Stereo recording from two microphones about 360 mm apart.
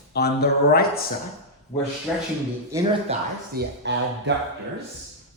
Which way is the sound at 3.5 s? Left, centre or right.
Right.